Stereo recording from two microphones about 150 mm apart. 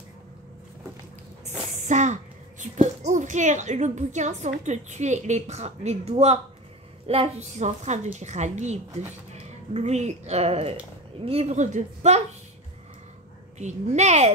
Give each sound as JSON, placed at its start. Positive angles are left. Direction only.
{"t": 1.4, "sound": "a sound", "side_deg": -50}
{"t": 2.6, "sound": "a woman's voice", "side_deg": -50}
{"t": 13.6, "sound": "a woman's voice", "side_deg": -50}